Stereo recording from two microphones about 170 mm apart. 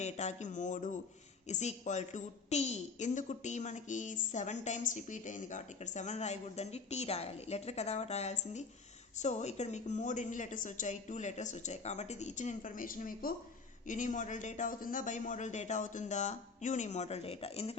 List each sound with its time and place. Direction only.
0.0 s a woman's voice: 40° left (ahead or behind)